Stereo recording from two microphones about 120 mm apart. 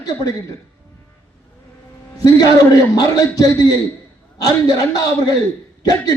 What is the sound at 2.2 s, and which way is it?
A man's voice, 35° left (ahead or behind).